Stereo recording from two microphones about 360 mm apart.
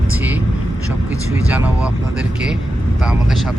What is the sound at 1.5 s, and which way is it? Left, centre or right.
Speech, centre.